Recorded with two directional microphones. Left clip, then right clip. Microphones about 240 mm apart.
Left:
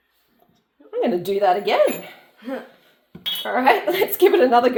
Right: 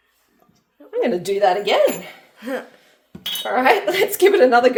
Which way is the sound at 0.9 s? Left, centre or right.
Centre.